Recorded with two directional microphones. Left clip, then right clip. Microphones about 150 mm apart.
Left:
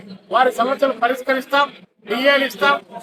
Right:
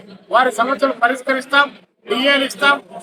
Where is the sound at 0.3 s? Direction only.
15° right (ahead or behind).